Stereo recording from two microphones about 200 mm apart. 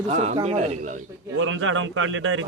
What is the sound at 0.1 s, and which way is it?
Speech, 35° right (ahead or behind).